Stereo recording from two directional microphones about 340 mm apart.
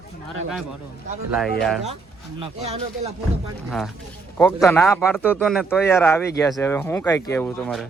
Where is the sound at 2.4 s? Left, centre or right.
Centre.